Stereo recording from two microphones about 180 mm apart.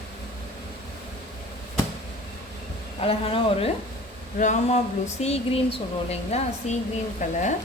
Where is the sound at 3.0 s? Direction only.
30° left (ahead or behind).